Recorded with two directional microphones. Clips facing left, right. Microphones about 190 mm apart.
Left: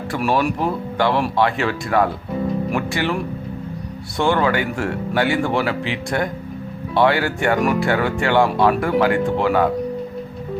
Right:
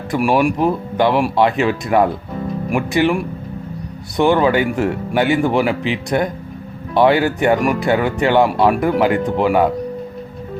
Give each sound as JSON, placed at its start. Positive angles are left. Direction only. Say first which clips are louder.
{"t": 0.1, "sound": "speech", "louder": "right 4 dB", "side_deg": -10}